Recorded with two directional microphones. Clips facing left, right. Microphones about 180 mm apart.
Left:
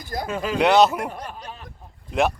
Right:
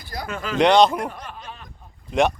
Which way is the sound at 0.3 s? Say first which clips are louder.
Right 2 dB; 15° left (ahead or behind).